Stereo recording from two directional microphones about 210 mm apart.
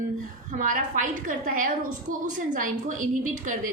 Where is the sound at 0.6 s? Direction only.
40° right (ahead or behind).